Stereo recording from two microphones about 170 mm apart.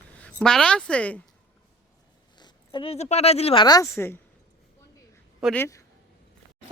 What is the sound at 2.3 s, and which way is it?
Speech, 25° left (ahead or behind).